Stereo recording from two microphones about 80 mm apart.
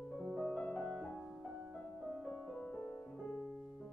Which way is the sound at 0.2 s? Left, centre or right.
Centre.